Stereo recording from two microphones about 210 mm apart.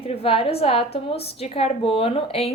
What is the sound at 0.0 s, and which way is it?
A woman's voice, 25° left (ahead or behind).